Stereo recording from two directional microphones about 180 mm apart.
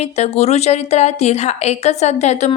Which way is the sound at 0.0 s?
35° left (ahead or behind).